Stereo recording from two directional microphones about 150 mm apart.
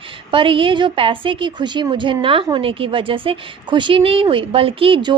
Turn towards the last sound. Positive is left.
turn(degrees=-35)  # may be behind; listen again after turning